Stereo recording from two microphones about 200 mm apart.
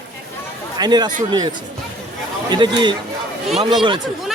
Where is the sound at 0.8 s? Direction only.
20° right (ahead or behind).